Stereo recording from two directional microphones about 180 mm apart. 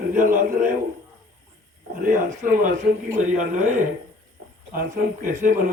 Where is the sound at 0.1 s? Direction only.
45° right (ahead or behind).